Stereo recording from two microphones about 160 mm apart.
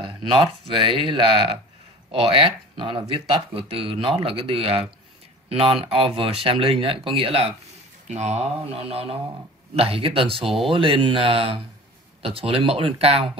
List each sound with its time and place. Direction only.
0.0 s speech: 30° right (ahead or behind)